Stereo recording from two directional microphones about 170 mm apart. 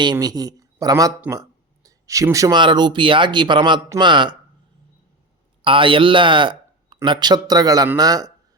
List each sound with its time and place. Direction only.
0.0 s a man's voice: 25° right (ahead or behind)
5.6 s a man's voice: 30° right (ahead or behind)